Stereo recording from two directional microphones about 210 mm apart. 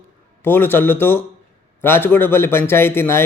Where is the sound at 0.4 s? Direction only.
10° left (ahead or behind).